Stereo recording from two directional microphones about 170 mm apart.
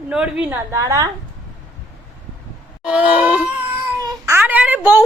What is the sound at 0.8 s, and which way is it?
Speech, 20° right (ahead or behind).